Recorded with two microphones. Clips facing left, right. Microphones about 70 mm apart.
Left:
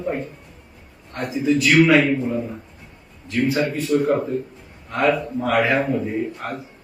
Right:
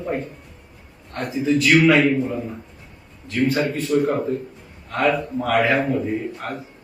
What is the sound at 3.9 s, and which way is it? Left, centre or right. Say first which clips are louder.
Speech: even; centre.